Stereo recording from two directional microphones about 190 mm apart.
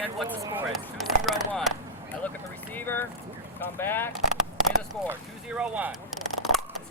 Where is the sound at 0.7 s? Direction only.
Centre (ahead or behind).